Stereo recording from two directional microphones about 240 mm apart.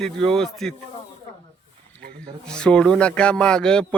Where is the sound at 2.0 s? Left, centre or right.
Right.